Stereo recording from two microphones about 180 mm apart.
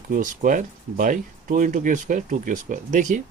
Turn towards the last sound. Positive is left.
turn(degrees=-45)  # may be behind; listen again after turning